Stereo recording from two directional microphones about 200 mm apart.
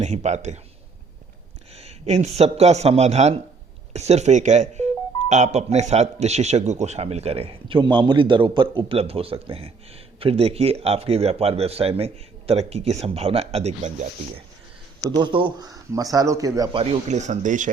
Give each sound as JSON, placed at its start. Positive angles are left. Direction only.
{"t": 0.0, "sound": "speech", "side_deg": -35}
{"t": 1.7, "sound": "a man's voice", "side_deg": -30}
{"t": 15.0, "sound": "a man's voice", "side_deg": -20}
{"t": 16.8, "sound": "speech", "side_deg": -30}